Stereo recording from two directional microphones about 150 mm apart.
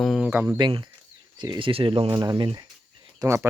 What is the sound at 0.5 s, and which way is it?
Speech, 30° right (ahead or behind).